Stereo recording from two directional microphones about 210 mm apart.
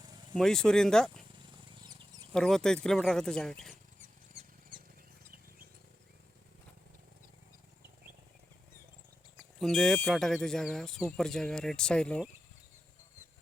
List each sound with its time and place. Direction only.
0.3 s speech: 5° left (ahead or behind)
1.9 s chicken: 20° right (ahead or behind)
2.3 s speech: 5° left (ahead or behind)
9.4 s speech: centre (ahead or behind)